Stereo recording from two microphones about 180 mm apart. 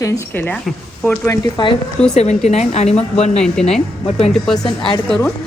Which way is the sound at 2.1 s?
40° left (ahead or behind).